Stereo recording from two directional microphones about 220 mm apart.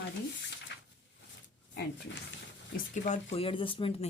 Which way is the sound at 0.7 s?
50° left (ahead or behind).